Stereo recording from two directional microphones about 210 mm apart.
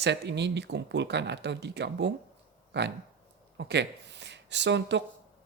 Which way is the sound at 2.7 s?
55° right (ahead or behind).